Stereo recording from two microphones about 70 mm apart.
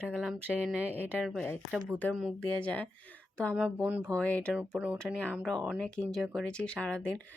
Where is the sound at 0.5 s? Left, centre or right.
Centre.